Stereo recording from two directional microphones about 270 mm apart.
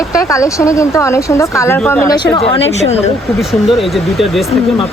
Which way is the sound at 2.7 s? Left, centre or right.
Left.